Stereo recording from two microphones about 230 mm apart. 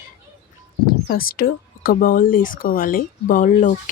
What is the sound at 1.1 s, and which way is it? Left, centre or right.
Speech, left.